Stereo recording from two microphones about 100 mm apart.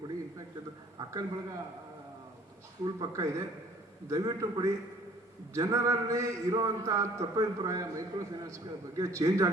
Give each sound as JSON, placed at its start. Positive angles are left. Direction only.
{"t": 0.9, "sound": "a man's voice", "side_deg": -35}
{"t": 2.8, "sound": "a man's voice", "side_deg": -40}